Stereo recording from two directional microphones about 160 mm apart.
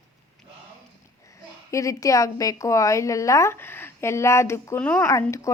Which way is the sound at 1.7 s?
20° left (ahead or behind).